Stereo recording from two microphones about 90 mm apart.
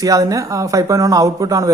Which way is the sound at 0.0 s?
40° right (ahead or behind).